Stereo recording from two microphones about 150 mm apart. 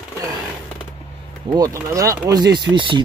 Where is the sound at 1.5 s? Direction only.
20° right (ahead or behind).